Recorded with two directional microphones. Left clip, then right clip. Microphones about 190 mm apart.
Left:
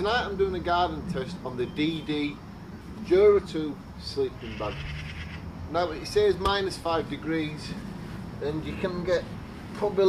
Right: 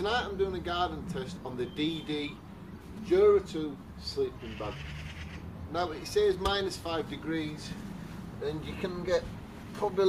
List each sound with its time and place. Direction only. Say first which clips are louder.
0.0 s speech: left 4 dB; 10° left (ahead or behind)
5.7 s speech: left 5 dB; 10° left (ahead or behind)
8.6 s speech: left 6 dB; 5° left (ahead or behind)